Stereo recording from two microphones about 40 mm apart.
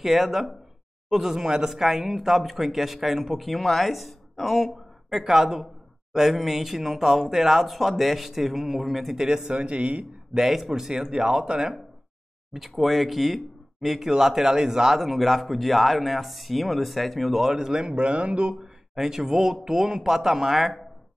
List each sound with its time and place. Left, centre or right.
0.0 s speech: centre
5.2 s speech: centre
9.5 s speech: right
10.3 s speech: centre
12.5 s speech: centre
17.8 s speech: right
18.5 s speech: centre